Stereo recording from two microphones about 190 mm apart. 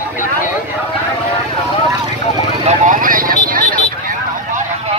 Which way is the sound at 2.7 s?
45° right (ahead or behind).